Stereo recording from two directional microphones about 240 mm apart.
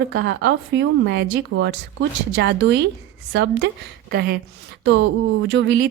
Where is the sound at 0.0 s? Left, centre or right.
Right.